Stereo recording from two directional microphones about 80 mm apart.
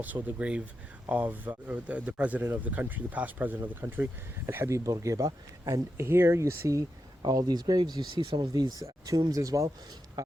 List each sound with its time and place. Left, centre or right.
0.0 s speech: right
4.9 s speech: right
7.2 s speech: right
9.0 s speech: right